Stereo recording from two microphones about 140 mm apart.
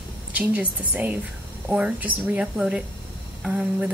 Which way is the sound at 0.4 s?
10° right (ahead or behind).